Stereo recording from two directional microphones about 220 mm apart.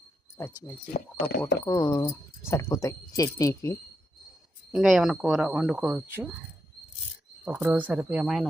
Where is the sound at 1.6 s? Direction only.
15° left (ahead or behind).